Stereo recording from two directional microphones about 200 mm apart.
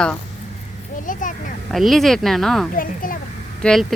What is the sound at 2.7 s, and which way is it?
Speech, 45° left (ahead or behind).